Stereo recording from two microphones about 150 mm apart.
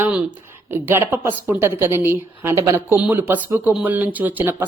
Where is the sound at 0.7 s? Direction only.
15° right (ahead or behind).